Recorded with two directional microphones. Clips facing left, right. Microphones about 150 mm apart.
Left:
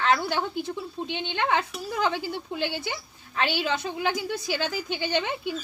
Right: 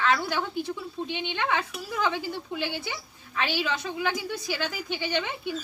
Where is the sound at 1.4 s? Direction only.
35° left (ahead or behind).